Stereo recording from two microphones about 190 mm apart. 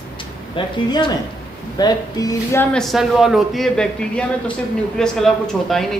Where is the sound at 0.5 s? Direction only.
25° left (ahead or behind); by 5.8 s centre (ahead or behind).